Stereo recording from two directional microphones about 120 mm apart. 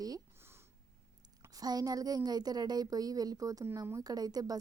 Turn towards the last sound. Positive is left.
turn(degrees=-30)  # may be behind; listen again after turning